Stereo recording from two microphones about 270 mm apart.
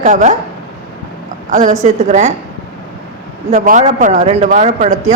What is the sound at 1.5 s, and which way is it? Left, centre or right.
Speech, right.